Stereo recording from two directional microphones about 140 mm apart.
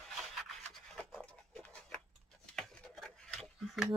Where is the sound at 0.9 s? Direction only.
5° left (ahead or behind).